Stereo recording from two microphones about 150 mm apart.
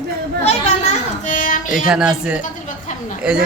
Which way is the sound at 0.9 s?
55° left (ahead or behind).